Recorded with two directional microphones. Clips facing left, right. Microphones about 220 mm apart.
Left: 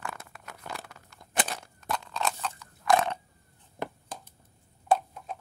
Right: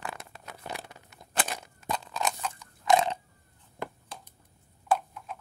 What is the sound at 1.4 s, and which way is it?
Crunch, 15° right (ahead or behind).